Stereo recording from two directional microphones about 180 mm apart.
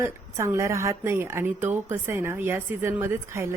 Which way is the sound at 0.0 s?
15° right (ahead or behind).